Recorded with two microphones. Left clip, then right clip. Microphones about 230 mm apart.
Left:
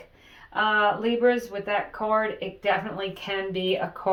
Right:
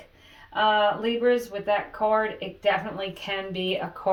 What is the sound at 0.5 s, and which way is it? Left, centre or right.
Speech, left.